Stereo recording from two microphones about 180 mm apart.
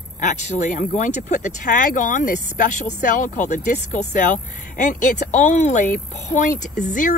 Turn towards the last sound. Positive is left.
turn(degrees=45)  # may be behind; listen again after turning